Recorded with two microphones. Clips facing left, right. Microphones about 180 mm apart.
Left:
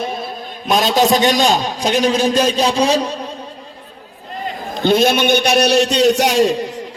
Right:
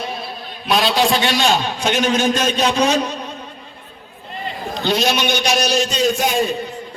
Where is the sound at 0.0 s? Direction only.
50° left (ahead or behind); by 3.2 s 30° left (ahead or behind).